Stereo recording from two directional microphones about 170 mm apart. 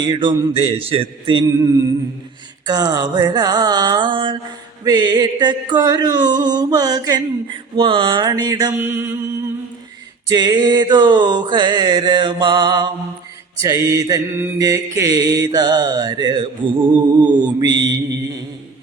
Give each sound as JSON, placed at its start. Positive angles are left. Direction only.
{"t": 0.0, "sound": "music", "side_deg": -30}
{"t": 2.6, "sound": "music", "side_deg": -25}
{"t": 8.7, "sound": "mantra", "side_deg": -10}
{"t": 10.2, "sound": "music", "side_deg": -25}